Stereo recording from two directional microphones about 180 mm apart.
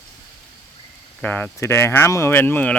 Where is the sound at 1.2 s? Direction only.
10° left (ahead or behind).